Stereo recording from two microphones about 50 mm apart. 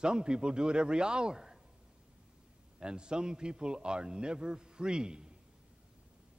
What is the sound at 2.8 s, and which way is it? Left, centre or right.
A man's voice, centre.